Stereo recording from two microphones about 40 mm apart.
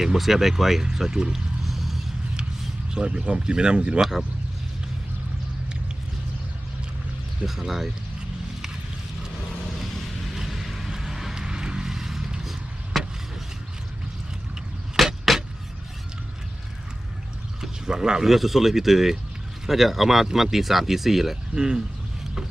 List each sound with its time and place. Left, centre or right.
0.0 s speech: centre
1.6 s a sound: centre
2.9 s speech: right
7.4 s speech: centre
9.7 s a sound: centre
12.9 s vehicle: centre
14.9 s vehicle: centre
17.6 s pour: centre
18.3 s speech: centre
21.5 s speech: centre